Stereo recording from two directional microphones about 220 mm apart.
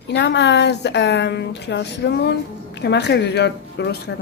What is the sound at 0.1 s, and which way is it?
A woman's voice, 50° left (ahead or behind).